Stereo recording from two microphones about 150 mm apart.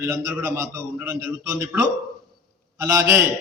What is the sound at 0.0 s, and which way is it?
A man's voice, 20° right (ahead or behind).